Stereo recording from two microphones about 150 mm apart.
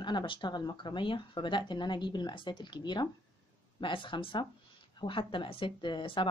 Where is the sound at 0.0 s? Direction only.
30° left (ahead or behind).